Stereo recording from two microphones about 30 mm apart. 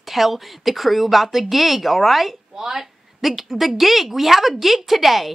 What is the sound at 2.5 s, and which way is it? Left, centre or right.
Speech, centre.